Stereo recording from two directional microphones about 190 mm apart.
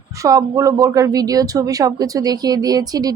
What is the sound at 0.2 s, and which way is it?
A woman's voice, 15° right (ahead or behind).